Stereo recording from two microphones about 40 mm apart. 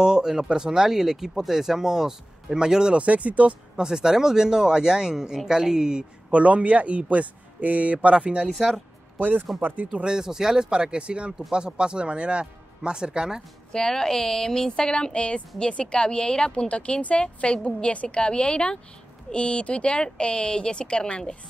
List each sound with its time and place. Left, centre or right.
0.0 s speech: centre
3.0 s a man's voice: right
3.7 s speech: centre
6.3 s a man's voice: right
8.5 s speech: centre
9.6 s speech: right
9.9 s speech: centre
13.7 s a woman's voice: centre
16.6 s a woman's voice: left